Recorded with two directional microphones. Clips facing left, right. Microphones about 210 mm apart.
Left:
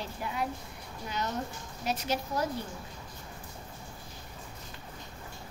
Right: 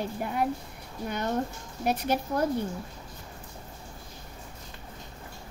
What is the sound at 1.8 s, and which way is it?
Speech, 55° right (ahead or behind).